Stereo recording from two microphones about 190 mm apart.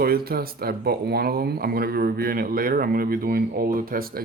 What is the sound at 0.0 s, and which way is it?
Speech, 50° right (ahead or behind).